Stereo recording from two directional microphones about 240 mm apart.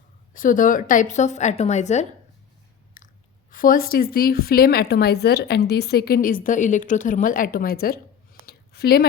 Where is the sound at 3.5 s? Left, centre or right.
Left.